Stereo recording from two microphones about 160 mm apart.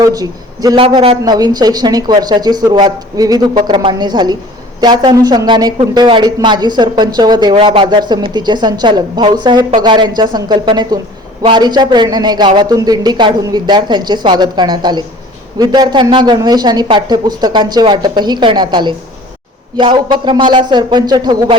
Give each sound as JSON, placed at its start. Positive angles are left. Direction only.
{"t": 0.0, "sound": "a man's voice", "side_deg": -20}
{"t": 7.5, "sound": "speech", "side_deg": -35}